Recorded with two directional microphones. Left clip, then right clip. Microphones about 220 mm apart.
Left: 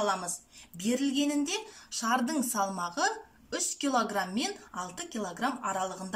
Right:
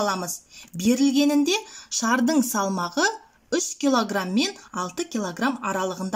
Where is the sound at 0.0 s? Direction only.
45° right (ahead or behind).